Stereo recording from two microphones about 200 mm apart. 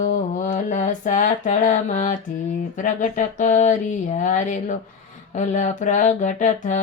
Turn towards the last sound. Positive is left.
turn(degrees=40)  # may be behind; listen again after turning